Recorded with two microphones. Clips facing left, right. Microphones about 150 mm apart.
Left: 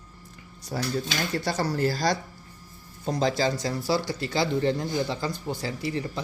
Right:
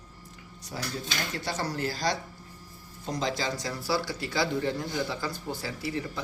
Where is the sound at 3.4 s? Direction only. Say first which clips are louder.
Left 6 dB; 25° left (ahead or behind).